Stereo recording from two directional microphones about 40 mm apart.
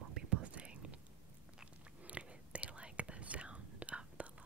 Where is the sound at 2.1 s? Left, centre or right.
Right.